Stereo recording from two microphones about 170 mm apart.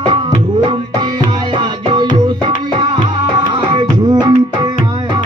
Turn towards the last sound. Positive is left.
turn(degrees=-25)  # may be behind; listen again after turning